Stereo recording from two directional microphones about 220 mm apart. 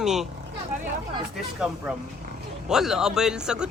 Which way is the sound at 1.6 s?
5° right (ahead or behind).